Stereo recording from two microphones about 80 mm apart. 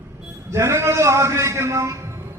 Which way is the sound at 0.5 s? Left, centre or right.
Right.